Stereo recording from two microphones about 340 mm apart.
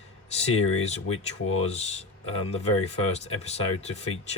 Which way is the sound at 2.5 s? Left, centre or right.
Centre.